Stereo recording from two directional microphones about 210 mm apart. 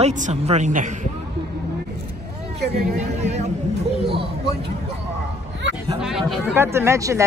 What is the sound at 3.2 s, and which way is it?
Speech, 30° right (ahead or behind).